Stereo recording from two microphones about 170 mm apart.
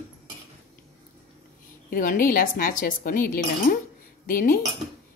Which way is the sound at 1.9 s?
55° left (ahead or behind).